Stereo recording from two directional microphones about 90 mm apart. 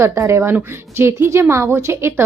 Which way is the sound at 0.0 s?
30° right (ahead or behind).